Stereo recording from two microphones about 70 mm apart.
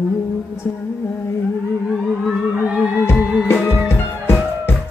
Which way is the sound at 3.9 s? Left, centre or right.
Left.